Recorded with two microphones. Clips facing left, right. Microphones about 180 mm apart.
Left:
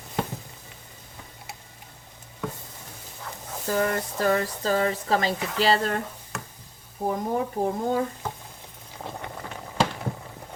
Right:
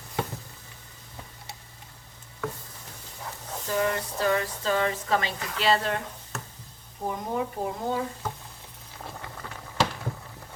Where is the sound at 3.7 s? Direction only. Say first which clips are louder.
Left 2 dB; 45° left (ahead or behind).